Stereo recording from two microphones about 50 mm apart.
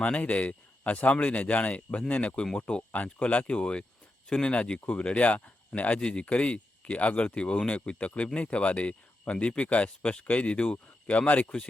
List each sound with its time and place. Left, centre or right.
0.0 s speech: left